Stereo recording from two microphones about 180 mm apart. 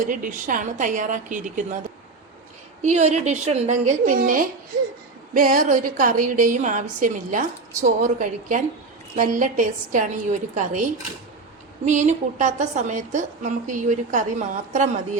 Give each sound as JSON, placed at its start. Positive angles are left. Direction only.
{"t": 0.0, "sound": "a woman's voice", "side_deg": -50}
{"t": 2.8, "sound": "a woman's voice", "side_deg": -40}